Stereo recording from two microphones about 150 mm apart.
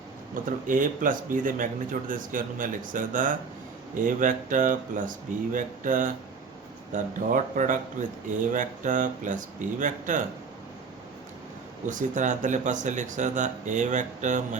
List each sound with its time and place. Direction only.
0.7 s speech: 60° right (ahead or behind)
11.9 s speech: 55° right (ahead or behind)